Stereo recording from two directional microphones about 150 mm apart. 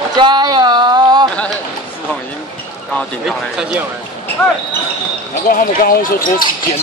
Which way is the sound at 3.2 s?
5° right (ahead or behind).